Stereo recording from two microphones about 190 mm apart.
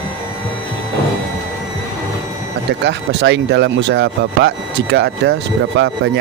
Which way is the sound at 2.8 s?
70° right (ahead or behind).